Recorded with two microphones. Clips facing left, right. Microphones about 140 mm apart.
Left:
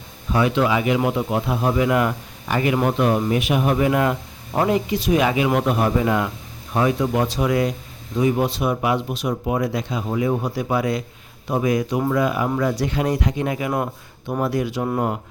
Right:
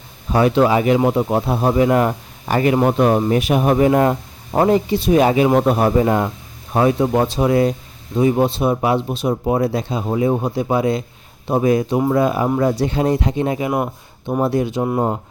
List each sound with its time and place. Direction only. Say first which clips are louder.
0.3 s speech: right 5 dB; 40° right (ahead or behind)